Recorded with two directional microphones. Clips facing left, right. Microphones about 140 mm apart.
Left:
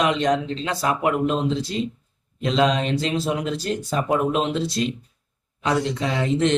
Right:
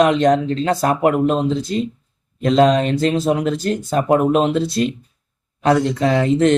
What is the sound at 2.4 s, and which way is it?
A man's voice, 45° right (ahead or behind).